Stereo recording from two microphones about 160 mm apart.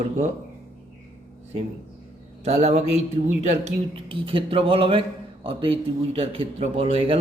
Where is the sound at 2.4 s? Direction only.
40° right (ahead or behind).